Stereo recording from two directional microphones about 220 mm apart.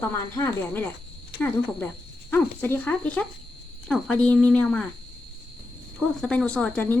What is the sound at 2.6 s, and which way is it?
Speech, 10° left (ahead or behind).